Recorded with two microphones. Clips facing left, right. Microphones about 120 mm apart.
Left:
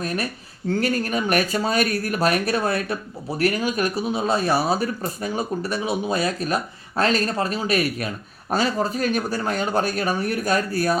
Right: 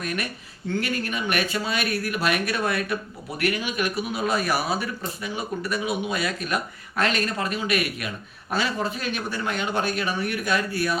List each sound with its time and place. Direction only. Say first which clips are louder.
0.0 s speech: left 3 dB; 35° left (ahead or behind)